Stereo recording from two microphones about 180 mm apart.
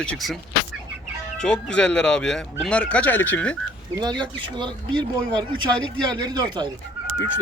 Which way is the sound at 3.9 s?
25° right (ahead or behind).